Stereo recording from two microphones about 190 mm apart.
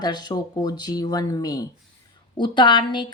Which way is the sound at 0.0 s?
20° left (ahead or behind).